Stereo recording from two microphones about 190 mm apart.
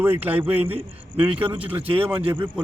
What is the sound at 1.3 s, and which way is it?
Speech, 30° right (ahead or behind).